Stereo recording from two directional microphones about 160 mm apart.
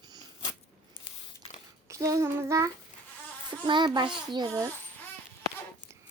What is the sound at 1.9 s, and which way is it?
Child singing, 20° right (ahead or behind).